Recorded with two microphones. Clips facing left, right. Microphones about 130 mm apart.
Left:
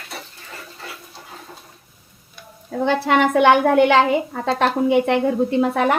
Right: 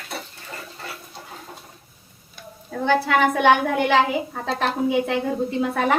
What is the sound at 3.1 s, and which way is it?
A woman's voice, 80° left.